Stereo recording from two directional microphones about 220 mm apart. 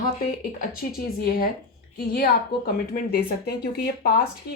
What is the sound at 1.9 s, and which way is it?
Speech, 45° left (ahead or behind).